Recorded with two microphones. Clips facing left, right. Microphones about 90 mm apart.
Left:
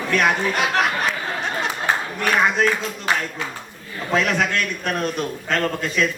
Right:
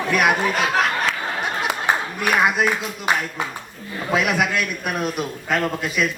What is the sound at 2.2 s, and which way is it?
A man's voice, 10° right (ahead or behind).